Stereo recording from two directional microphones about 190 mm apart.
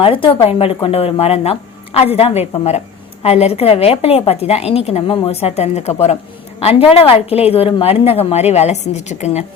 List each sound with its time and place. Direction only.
0.0 s a woman's voice: 30° left (ahead or behind)